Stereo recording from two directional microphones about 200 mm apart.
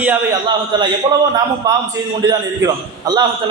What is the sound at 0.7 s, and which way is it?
A man's voice, 20° right (ahead or behind).